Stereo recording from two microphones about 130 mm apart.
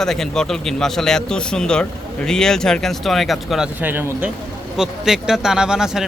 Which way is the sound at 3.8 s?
15° right (ahead or behind).